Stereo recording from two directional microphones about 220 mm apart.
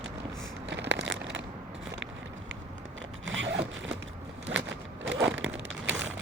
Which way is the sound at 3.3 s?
55° right (ahead or behind).